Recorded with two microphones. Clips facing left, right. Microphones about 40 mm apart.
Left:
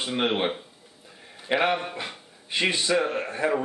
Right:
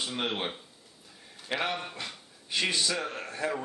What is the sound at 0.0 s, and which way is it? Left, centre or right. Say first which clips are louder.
A man's voice: left 7 dB; left.